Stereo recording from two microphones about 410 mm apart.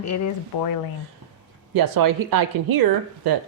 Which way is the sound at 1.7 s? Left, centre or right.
Right.